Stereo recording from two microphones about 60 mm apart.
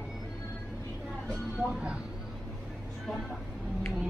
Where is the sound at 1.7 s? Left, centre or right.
Centre.